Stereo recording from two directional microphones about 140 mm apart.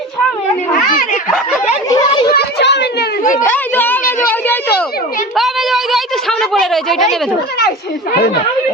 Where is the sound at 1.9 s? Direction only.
25° left (ahead or behind).